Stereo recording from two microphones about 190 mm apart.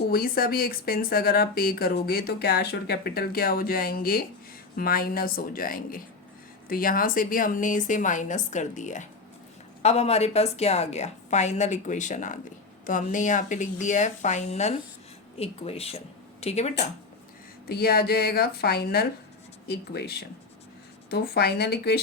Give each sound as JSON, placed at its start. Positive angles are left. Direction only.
{"t": 0.1, "sound": "a woman's voice", "side_deg": 50}
{"t": 17.7, "sound": "speech", "side_deg": 55}